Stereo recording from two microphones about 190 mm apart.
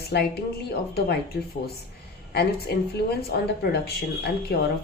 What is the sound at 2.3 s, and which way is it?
A woman's voice, 55° left (ahead or behind).